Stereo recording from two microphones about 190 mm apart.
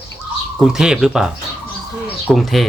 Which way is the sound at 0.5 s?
5° right (ahead or behind).